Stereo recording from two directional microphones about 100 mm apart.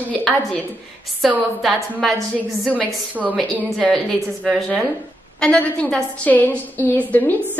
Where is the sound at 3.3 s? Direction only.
5° left (ahead or behind).